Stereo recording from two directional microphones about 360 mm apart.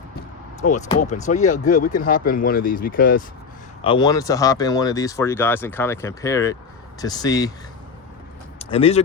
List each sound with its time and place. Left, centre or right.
0.6 s speech: left
3.8 s speech: centre
8.5 s speech: centre